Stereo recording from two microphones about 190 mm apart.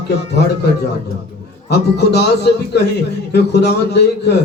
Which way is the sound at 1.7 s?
60° left (ahead or behind).